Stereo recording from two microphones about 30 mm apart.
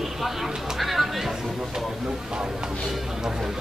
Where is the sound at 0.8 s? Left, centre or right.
Centre.